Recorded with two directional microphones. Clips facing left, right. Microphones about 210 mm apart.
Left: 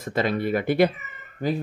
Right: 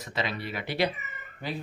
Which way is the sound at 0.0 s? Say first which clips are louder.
Left 9 dB; 50° left (ahead or behind).